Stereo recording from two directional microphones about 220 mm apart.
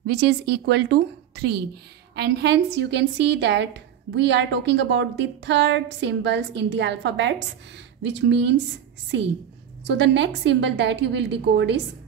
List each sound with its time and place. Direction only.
0.0 s a woman's voice: 50° right (ahead or behind)
9.8 s a woman's voice: 55° right (ahead or behind)